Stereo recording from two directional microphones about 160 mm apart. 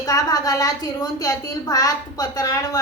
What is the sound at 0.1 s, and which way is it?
A woman's voice, 20° left (ahead or behind).